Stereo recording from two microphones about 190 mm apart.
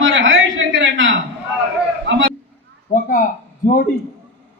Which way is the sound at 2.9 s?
45° left (ahead or behind).